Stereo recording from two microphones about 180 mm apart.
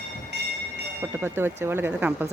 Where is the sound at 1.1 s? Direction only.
10° right (ahead or behind).